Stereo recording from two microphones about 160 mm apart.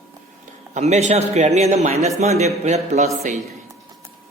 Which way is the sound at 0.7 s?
45° right (ahead or behind).